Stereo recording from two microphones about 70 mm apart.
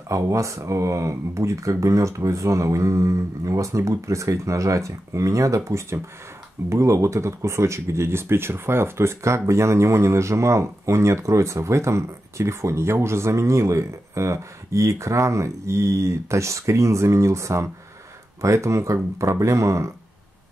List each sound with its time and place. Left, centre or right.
0.1 s speech: right